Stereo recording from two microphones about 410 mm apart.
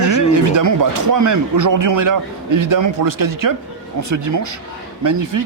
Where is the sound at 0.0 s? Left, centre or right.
Right.